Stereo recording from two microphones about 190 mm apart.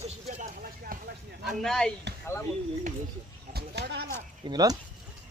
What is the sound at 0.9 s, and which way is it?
Speech, 45° right (ahead or behind).